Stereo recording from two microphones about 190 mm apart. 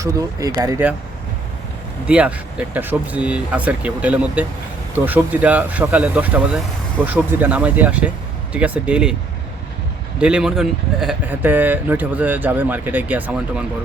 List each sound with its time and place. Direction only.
0.0 s speech: 20° right (ahead or behind)
2.0 s speech: 5° right (ahead or behind)
10.2 s speech: 5° right (ahead or behind)